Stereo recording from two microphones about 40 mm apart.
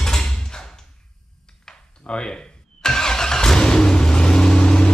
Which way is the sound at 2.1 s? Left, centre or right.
Left.